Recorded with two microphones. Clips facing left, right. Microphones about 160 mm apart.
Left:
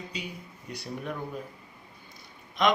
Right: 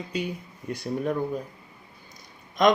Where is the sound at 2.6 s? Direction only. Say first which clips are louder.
Right 5 dB; 45° right (ahead or behind).